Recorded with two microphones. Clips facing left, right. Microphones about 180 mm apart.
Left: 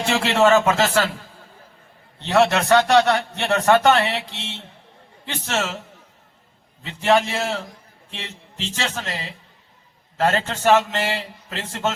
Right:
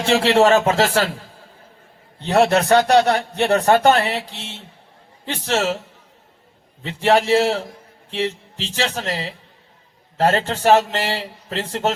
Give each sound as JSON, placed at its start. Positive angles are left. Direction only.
{"t": 0.0, "sound": "a man's voice", "side_deg": -35}
{"t": 2.3, "sound": "a man's voice", "side_deg": -35}
{"t": 6.8, "sound": "a man's voice", "side_deg": -35}